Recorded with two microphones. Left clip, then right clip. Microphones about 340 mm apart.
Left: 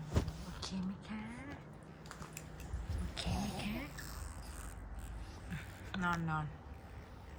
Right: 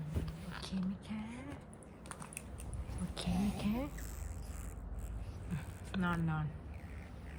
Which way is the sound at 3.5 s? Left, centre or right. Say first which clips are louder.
Right 3 dB; centre.